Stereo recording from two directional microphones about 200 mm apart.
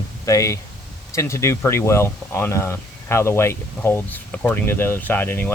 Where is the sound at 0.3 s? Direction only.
15° left (ahead or behind).